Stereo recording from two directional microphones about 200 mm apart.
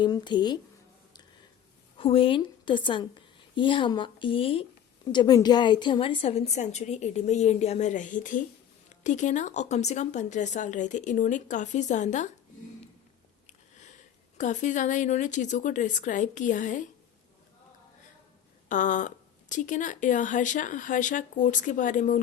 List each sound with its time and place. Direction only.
0.0 s speech: 20° left (ahead or behind)
2.0 s a woman's voice: 30° left (ahead or behind)
13.5 s speech: 35° left (ahead or behind)
18.7 s a woman's voice: 40° left (ahead or behind)